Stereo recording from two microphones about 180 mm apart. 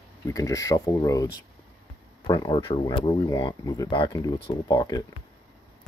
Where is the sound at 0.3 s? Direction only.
20° left (ahead or behind).